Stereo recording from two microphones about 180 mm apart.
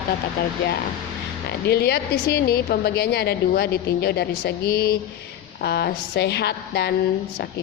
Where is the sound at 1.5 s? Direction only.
65° left (ahead or behind).